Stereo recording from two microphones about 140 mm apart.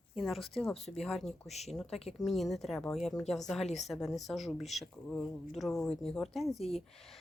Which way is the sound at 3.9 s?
Centre (ahead or behind).